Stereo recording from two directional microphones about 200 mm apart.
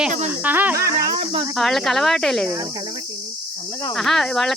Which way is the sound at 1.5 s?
Centre (ahead or behind).